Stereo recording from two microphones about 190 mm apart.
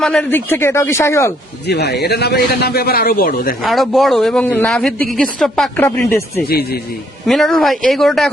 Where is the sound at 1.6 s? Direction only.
60° left (ahead or behind).